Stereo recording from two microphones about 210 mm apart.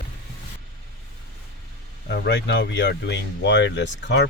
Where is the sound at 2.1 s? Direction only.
55° left (ahead or behind).